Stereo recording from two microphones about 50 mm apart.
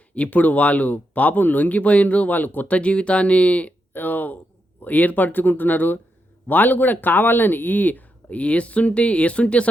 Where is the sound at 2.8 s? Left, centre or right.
Left.